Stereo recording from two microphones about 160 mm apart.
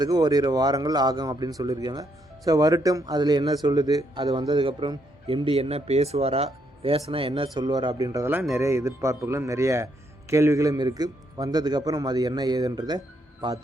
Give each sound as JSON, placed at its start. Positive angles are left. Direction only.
{"t": 0.0, "sound": "speech", "side_deg": -25}